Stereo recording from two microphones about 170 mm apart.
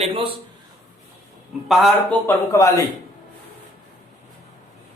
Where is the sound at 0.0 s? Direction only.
35° right (ahead or behind).